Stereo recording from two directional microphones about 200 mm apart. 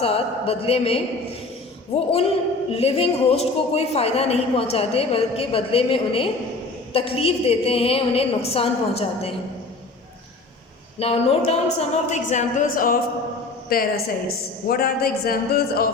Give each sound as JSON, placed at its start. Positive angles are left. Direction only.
{"t": 0.0, "sound": "a woman's voice", "side_deg": 30}
{"t": 2.1, "sound": "a woman's voice", "side_deg": 30}
{"t": 11.0, "sound": "a woman's voice", "side_deg": 30}